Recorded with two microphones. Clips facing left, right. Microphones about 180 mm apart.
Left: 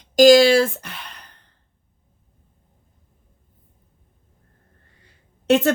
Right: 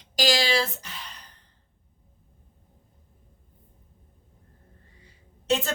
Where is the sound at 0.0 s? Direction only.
45° left (ahead or behind); by 1.4 s 60° left (ahead or behind).